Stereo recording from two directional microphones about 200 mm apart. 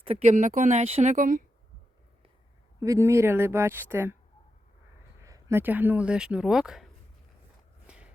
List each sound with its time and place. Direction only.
0.0 s speech: 30° right (ahead or behind)
2.8 s speech: 15° right (ahead or behind)
5.2 s speech: 15° right (ahead or behind)
7.9 s walk: 5° right (ahead or behind)